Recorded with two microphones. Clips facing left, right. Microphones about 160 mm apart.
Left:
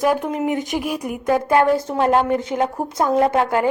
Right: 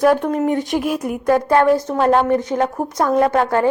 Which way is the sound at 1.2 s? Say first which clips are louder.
Right 2 dB; 20° left (ahead or behind).